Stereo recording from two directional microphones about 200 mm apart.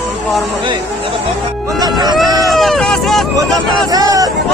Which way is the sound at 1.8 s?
20° right (ahead or behind).